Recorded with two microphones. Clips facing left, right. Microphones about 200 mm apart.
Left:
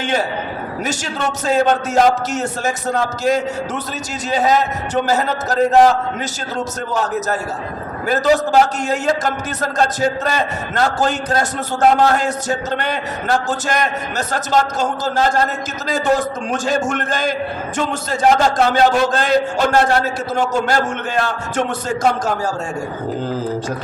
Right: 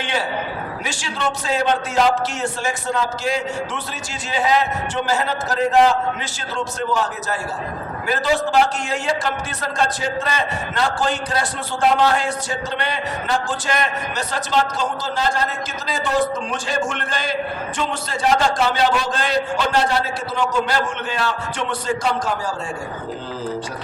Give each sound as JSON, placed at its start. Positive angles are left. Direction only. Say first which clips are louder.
{"t": 0.9, "sound": "a man's voice", "louder": "left 3 dB", "side_deg": 45}
{"t": 8.0, "sound": "a man's voice", "louder": "left 5 dB", "side_deg": 45}